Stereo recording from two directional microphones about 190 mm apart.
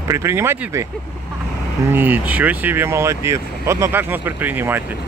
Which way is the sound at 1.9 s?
10° right (ahead or behind).